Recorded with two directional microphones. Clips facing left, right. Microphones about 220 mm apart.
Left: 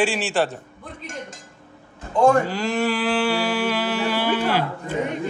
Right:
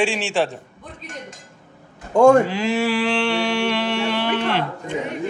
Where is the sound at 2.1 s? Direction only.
45° right (ahead or behind).